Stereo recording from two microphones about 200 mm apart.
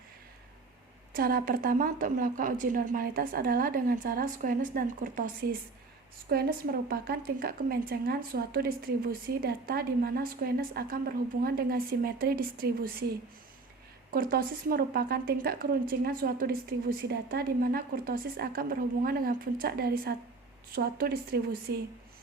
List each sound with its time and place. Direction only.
1.1 s speech: 45° right (ahead or behind)